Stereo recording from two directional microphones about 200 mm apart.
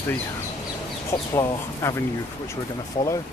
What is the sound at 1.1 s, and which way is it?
Speech, 15° left (ahead or behind).